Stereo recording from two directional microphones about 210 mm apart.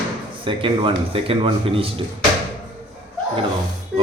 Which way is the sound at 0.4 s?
25° right (ahead or behind).